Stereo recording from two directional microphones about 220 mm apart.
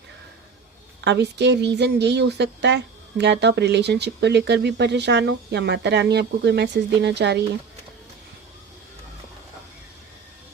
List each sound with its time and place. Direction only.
1.0 s speech: 50° right (ahead or behind)